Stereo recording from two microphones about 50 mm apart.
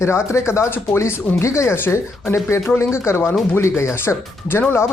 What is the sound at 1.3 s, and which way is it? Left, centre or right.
Speech, left.